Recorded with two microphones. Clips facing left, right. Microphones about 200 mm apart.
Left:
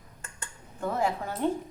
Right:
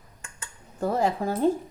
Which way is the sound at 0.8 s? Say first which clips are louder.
Right 4 dB; 35° right (ahead or behind).